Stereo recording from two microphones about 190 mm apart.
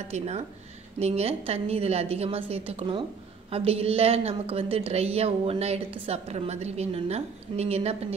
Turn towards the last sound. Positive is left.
turn(degrees=-35)  # may be behind; listen again after turning